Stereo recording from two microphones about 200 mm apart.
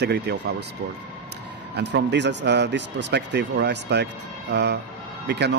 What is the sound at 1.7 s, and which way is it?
Speech, 60° right (ahead or behind).